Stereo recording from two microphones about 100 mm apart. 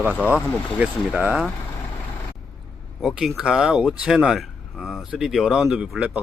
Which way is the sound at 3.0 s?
5° right (ahead or behind).